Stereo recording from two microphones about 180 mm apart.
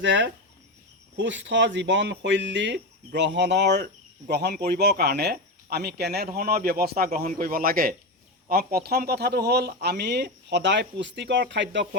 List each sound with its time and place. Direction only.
0.0 s speech: 90° right